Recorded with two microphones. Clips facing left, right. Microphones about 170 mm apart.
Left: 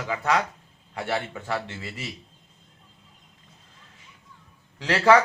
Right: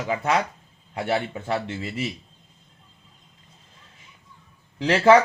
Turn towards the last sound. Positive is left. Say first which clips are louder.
# right 3 dB
turn(degrees=-25)  # may be behind; listen again after turning